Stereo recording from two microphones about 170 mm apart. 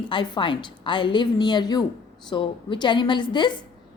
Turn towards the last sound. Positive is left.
turn(degrees=25)  # may be behind; listen again after turning